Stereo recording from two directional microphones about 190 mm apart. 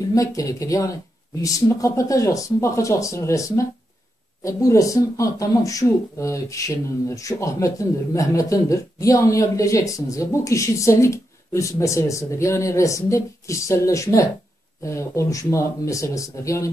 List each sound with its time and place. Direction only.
0.1 s speech: 15° left (ahead or behind)